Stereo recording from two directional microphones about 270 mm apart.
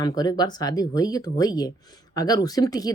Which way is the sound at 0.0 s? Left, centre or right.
Centre.